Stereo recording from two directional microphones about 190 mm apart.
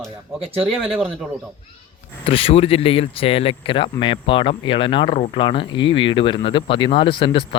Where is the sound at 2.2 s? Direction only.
30° left (ahead or behind).